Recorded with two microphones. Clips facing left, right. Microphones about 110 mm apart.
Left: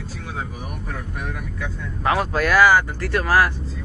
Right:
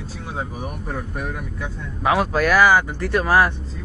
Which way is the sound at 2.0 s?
10° right (ahead or behind).